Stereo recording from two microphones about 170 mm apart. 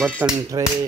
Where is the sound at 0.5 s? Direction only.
25° right (ahead or behind).